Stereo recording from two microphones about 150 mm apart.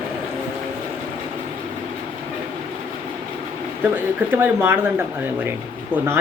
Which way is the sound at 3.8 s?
10° right (ahead or behind).